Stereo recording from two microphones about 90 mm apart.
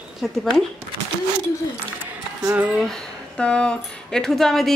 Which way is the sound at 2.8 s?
10° left (ahead or behind).